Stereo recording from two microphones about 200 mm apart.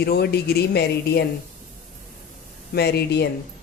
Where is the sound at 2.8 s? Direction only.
55° left (ahead or behind).